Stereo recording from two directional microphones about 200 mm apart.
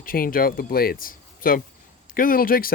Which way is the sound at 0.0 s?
45° left (ahead or behind).